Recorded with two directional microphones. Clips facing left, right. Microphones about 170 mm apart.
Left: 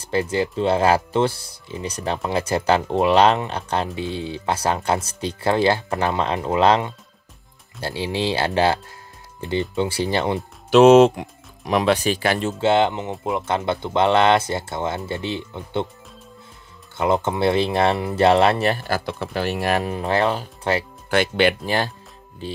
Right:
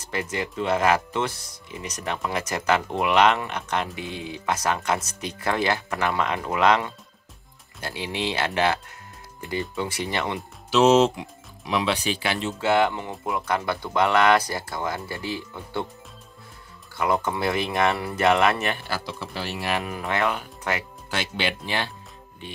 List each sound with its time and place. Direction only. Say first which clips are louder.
0.0 s speech: left 7 dB; 30° left (ahead or behind)
10.7 s speech: left 7 dB; 55° left (ahead or behind)
12.5 s speech: left 2 dB; 25° left (ahead or behind)
16.9 s speech: left 4 dB; 25° left (ahead or behind); by 19.9 s 45° left (ahead or behind)
19.9 s speech: left 5 dB; 30° left (ahead or behind)
21.1 s speech: left 10 dB; 55° left (ahead or behind); by 22.6 s 35° left (ahead or behind)